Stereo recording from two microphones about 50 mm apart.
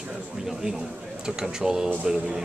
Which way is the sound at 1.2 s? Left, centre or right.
Centre.